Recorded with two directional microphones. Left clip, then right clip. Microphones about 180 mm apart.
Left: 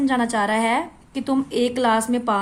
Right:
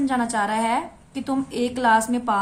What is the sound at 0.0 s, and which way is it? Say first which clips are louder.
A woman's voice: left 2 dB; 35° left (ahead or behind).